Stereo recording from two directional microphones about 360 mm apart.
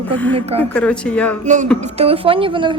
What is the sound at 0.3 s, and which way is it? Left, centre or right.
Speech, centre.